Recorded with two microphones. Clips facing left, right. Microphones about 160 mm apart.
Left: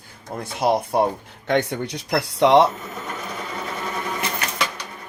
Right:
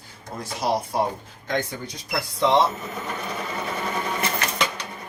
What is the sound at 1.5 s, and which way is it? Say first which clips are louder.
Speech: left 6 dB; 70° left (ahead or behind).